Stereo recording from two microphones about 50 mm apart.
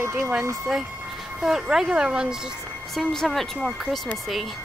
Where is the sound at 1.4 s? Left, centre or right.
Centre.